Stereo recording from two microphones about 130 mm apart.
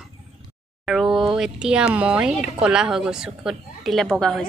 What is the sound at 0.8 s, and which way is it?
A woman's voice, centre (ahead or behind).